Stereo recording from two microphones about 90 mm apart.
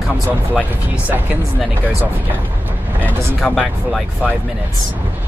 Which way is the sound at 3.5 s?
10° right (ahead or behind).